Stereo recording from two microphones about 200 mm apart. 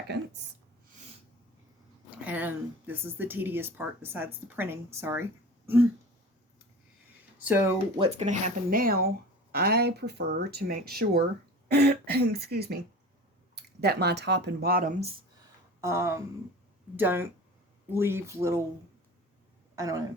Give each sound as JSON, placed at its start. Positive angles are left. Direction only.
{"t": 2.0, "sound": "speech", "side_deg": -5}
{"t": 7.4, "sound": "speech", "side_deg": -10}
{"t": 7.9, "sound": "speech", "side_deg": -30}
{"t": 15.8, "sound": "speech", "side_deg": -15}
{"t": 19.7, "sound": "speech", "side_deg": -15}